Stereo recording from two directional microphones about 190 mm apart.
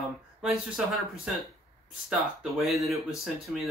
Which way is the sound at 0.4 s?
5° right (ahead or behind).